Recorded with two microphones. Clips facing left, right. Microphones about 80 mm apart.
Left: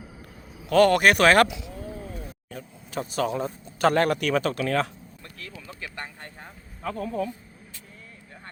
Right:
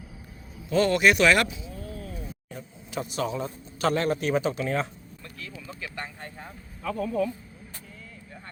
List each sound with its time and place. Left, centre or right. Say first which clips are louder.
0.7 s speech: left 3 dB; left
1.5 s speech: left 3 dB; left
1.8 s a sound: left 1 dB; centre
2.5 s speech: left 1 dB; left
6.8 s speech: right 2 dB; left